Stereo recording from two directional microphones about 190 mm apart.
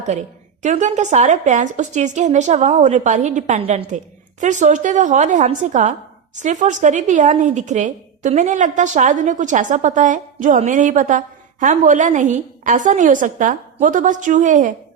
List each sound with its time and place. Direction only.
0.6 s speech: 40° right (ahead or behind)